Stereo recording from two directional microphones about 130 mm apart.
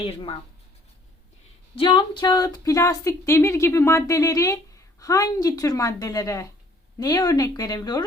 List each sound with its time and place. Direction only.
0.0 s speech: 45° left (ahead or behind)
1.7 s a woman's voice: 40° left (ahead or behind)